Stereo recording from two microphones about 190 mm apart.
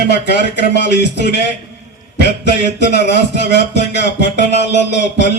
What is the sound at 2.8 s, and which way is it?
Speech, 65° left (ahead or behind).